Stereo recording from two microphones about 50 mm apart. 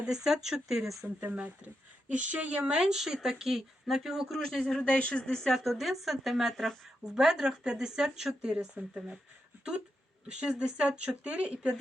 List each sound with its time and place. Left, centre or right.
0.0 s speech: centre
1.0 s speech: right; by 4.4 s centre
4.4 s speech: centre
5.6 s speech: centre
7.2 s speech: centre
10.2 s speech: right